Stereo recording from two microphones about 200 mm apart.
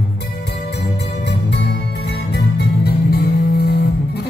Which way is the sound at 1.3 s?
60° left (ahead or behind).